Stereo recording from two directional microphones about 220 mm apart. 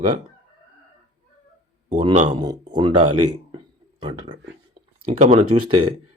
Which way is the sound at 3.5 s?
20° right (ahead or behind).